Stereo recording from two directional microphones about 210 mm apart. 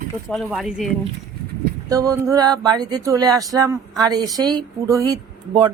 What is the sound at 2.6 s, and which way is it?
Speech, 20° right (ahead or behind).